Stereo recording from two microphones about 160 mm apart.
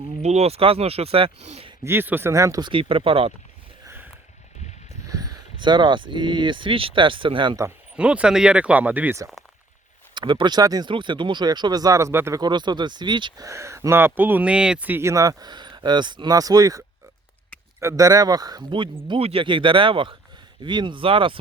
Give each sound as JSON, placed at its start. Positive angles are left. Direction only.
{"t": 0.2, "sound": "speech", "side_deg": -45}
{"t": 1.8, "sound": "speech", "side_deg": -15}
{"t": 4.9, "sound": "speech", "side_deg": -20}
{"t": 7.9, "sound": "speech", "side_deg": -5}
{"t": 10.2, "sound": "speech", "side_deg": -30}
{"t": 12.4, "sound": "speech", "side_deg": -25}